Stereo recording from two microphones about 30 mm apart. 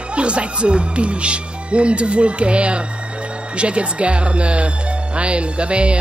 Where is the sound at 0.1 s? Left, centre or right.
Right.